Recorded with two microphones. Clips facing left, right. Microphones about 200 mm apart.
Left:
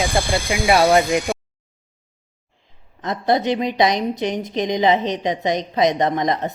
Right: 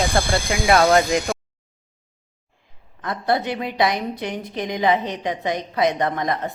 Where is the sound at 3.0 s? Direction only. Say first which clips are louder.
Left 3 dB; 20° left (ahead or behind).